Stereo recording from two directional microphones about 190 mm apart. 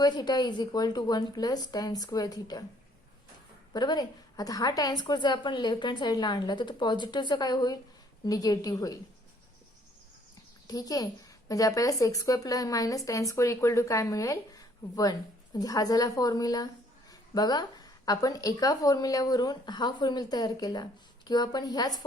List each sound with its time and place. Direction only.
0.0 s a woman's voice: 20° left (ahead or behind)
3.7 s a woman's voice: 20° left (ahead or behind)
10.7 s a woman's voice: 20° left (ahead or behind)